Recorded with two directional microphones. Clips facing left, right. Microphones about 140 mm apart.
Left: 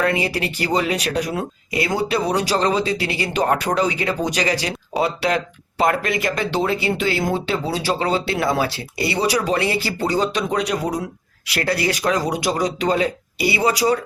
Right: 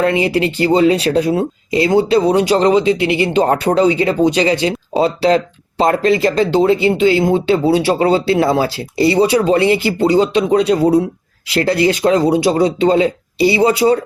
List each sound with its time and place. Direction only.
0.0 s speech: 25° right (ahead or behind)